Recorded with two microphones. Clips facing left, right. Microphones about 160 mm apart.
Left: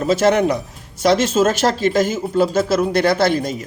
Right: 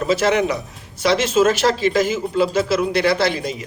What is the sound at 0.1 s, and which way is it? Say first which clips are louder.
Speech: left 3 dB; 45° left (ahead or behind).